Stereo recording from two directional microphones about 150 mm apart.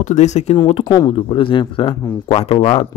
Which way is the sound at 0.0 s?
50° left (ahead or behind).